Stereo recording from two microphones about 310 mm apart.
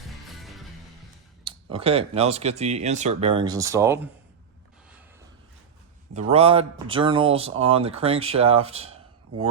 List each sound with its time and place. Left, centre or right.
1.5 s speech: centre
6.1 s speech: centre